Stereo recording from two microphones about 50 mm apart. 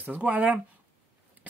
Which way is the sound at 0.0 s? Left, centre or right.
Right.